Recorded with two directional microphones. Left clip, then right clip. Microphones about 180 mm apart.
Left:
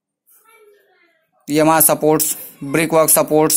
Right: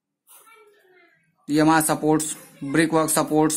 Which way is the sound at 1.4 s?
20° left (ahead or behind).